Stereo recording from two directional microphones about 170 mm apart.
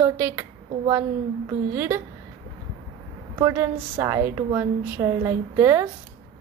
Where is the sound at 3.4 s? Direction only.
15° right (ahead or behind).